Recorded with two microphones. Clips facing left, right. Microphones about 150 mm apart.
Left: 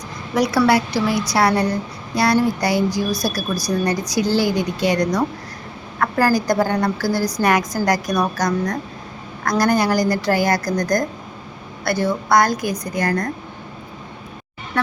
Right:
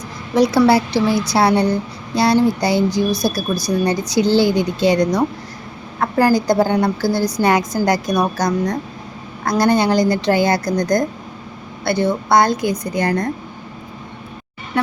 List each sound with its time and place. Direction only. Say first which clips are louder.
0.3 s a woman's voice: right 3 dB; 25° right (ahead or behind)